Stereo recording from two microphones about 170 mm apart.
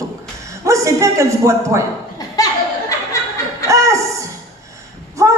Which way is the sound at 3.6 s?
20° right (ahead or behind).